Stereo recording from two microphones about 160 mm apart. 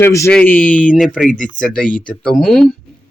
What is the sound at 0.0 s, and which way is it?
Speech, 15° left (ahead or behind).